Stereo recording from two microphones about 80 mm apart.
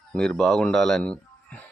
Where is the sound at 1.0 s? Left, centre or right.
Centre.